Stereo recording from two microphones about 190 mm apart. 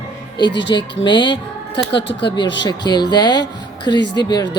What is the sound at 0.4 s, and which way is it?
Speech, 70° left (ahead or behind).